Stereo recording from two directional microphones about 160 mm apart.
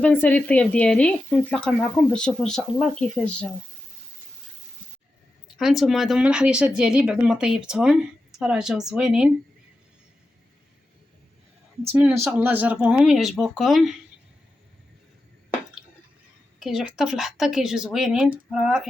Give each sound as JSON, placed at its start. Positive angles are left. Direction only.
{"t": 0.0, "sound": "speech", "side_deg": 10}
{"t": 5.5, "sound": "speech", "side_deg": 0}
{"t": 11.8, "sound": "speech", "side_deg": -15}
{"t": 16.6, "sound": "speech", "side_deg": 0}